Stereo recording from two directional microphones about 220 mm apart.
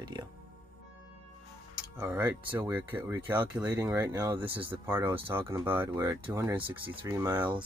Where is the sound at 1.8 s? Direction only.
5° right (ahead or behind).